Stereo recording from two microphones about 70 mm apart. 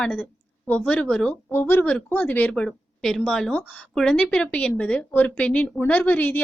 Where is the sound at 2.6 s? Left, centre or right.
Centre.